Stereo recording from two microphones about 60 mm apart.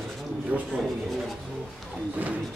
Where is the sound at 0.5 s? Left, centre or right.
Right.